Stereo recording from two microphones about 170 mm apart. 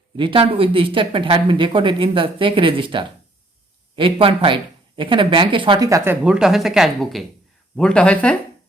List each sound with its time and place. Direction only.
0.2 s speech: 30° right (ahead or behind)
6.2 s speech: 5° right (ahead or behind)